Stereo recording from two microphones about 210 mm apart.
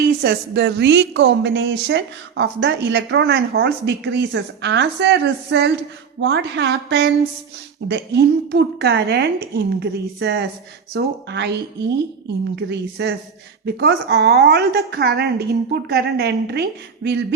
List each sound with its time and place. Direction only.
0.0 s a woman's voice: 50° right (ahead or behind)
12.5 s a woman's voice: 55° right (ahead or behind)